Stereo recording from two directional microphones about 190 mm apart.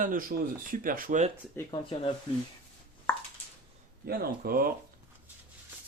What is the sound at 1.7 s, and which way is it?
Speech, 25° left (ahead or behind).